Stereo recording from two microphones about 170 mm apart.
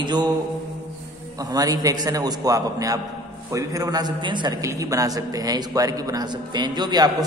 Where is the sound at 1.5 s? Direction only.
20° right (ahead or behind).